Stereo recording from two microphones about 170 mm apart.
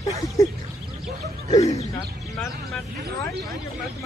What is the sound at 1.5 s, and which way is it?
Speech, 40° left (ahead or behind).